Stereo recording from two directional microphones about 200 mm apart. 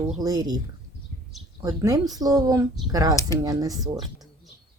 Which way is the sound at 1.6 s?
20° right (ahead or behind).